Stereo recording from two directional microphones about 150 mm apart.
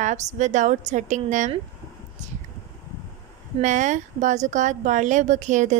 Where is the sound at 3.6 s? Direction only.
55° right (ahead or behind).